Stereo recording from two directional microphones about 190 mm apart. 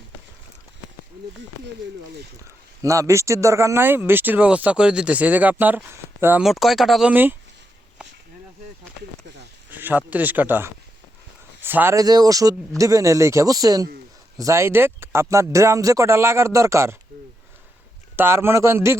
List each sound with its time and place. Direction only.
2.8 s speech: 15° right (ahead or behind)
6.4 s speech: centre (ahead or behind)
9.7 s speech: 10° right (ahead or behind)
18.2 s speech: 15° right (ahead or behind)